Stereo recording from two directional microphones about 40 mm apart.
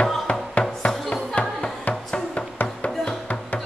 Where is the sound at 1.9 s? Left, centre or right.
Left.